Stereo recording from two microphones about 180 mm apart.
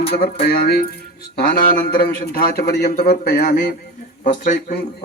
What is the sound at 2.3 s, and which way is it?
A man's voice, 55° left (ahead or behind).